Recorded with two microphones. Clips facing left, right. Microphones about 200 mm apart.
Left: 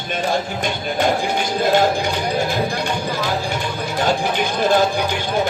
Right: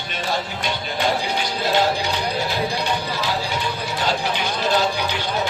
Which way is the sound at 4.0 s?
50° left (ahead or behind).